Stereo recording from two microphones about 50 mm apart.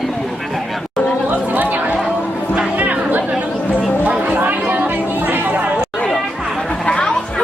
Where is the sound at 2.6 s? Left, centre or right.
Right.